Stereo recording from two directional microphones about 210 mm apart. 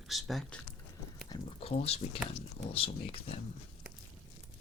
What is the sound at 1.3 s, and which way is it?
Speech, 30° left (ahead or behind).